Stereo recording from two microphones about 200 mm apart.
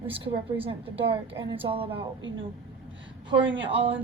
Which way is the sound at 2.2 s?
70° right (ahead or behind).